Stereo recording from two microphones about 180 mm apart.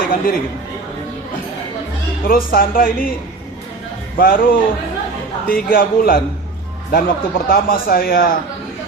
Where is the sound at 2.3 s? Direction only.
55° left (ahead or behind).